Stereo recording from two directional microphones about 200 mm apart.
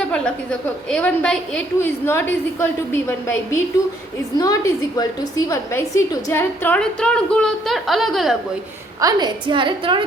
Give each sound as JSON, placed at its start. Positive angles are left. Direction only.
{"t": 0.9, "sound": "a woman's voice", "side_deg": 5}
{"t": 9.0, "sound": "a woman's voice", "side_deg": -20}